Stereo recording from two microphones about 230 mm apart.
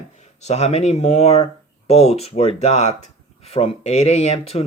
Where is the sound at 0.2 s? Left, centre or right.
Left.